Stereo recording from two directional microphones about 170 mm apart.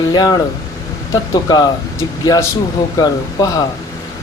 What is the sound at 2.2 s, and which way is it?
Speech, 20° left (ahead or behind).